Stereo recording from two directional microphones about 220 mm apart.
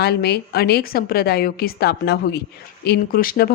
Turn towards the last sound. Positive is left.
turn(degrees=40)  # may be behind; listen again after turning